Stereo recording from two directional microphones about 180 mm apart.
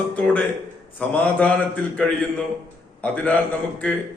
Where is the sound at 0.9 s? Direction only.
10° left (ahead or behind).